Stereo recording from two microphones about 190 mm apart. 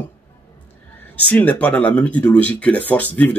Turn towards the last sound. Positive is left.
turn(degrees=10)  # may be behind; listen again after turning